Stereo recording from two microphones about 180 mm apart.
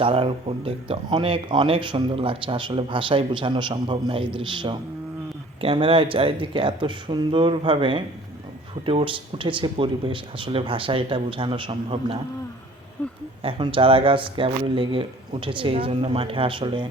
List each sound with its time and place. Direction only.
0.0 s speech: 30° right (ahead or behind)
13.0 s speech: 5° left (ahead or behind)
13.4 s speech: 30° right (ahead or behind)